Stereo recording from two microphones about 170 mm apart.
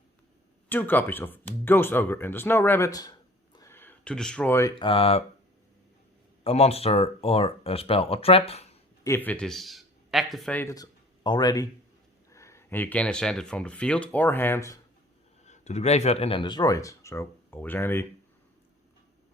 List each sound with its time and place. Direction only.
0.7 s speech: 10° left (ahead or behind)
3.5 s a sound: 15° left (ahead or behind)
4.8 s speech: 35° left (ahead or behind)
6.4 s speech: 35° left (ahead or behind)
9.0 s a man's voice: 10° left (ahead or behind)
11.2 s speech: 25° left (ahead or behind)
15.4 s speech: 45° left (ahead or behind); by 18.0 s 15° left (ahead or behind)